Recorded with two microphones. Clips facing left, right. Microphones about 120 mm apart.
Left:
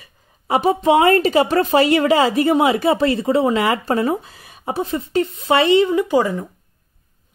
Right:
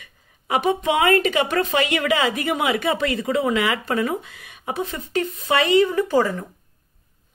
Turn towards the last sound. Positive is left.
turn(degrees=15)  # may be behind; listen again after turning